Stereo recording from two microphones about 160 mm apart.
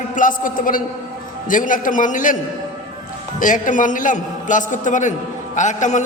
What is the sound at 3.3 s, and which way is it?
A man's voice, 55° left (ahead or behind).